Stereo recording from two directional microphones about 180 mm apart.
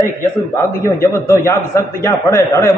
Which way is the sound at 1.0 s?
15° left (ahead or behind).